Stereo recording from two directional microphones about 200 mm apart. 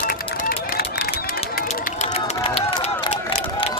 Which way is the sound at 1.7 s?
40° left (ahead or behind).